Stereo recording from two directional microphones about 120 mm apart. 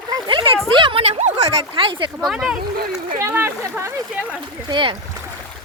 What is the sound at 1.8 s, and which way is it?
Speech, 45° right (ahead or behind).